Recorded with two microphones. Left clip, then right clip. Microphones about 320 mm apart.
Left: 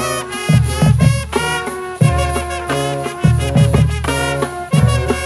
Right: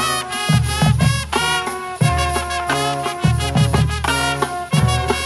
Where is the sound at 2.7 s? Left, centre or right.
Centre.